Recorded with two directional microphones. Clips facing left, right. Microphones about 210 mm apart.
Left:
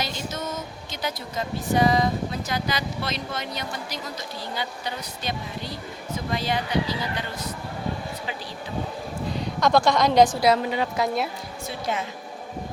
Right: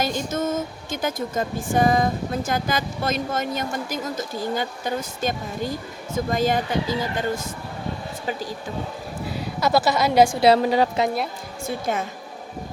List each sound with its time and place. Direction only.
0.0 s speech: 50° right (ahead or behind)
9.2 s a woman's voice: 5° right (ahead or behind)
10.4 s a woman's voice: 35° right (ahead or behind)
11.9 s speech: 50° right (ahead or behind)